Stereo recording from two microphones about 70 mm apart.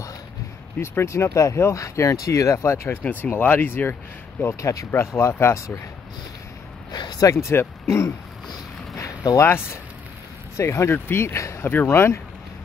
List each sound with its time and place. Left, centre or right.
0.7 s speech: left
3.0 s speech: left
4.6 s speech: left
4.9 s speech: left
6.9 s a sound: left
7.2 s speech: left
9.4 s speech: left
11.6 s speech: left